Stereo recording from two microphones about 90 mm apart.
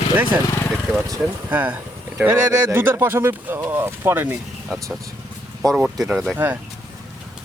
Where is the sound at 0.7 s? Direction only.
5° right (ahead or behind).